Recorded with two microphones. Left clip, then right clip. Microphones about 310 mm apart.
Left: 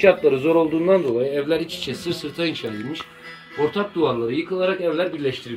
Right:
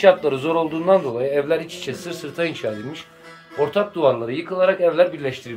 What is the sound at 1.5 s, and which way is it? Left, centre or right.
Speech, centre.